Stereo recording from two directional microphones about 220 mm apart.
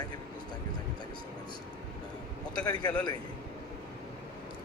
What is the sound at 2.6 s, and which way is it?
Speech, 20° left (ahead or behind).